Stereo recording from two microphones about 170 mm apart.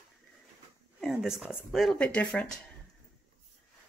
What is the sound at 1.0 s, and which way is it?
Speech, 5° right (ahead or behind).